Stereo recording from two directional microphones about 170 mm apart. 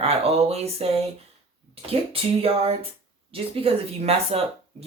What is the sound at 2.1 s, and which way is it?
Speech, 35° right (ahead or behind).